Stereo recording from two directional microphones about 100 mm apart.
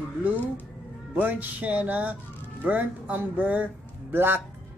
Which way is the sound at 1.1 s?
15° right (ahead or behind).